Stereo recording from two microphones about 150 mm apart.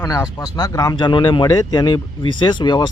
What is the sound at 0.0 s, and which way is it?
Speech, 20° left (ahead or behind).